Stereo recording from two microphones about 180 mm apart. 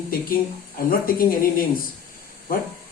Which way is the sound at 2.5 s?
50° left (ahead or behind).